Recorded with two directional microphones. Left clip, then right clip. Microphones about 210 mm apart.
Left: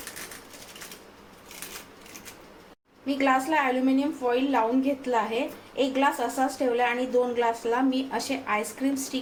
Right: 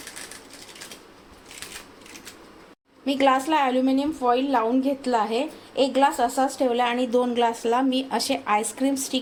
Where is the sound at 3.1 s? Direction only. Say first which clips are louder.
Right 4 dB; 45° right (ahead or behind).